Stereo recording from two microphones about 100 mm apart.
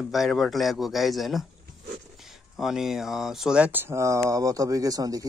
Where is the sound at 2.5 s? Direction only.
5° right (ahead or behind).